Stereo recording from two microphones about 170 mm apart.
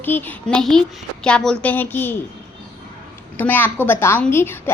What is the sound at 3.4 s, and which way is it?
Speech, 10° left (ahead or behind).